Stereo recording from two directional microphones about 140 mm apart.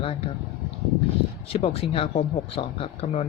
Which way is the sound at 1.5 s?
45° left (ahead or behind).